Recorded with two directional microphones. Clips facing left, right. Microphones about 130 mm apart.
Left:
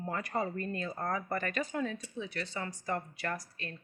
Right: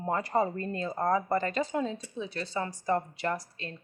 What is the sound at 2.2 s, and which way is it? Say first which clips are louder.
A woman's voice: right 5 dB; 35° right (ahead or behind).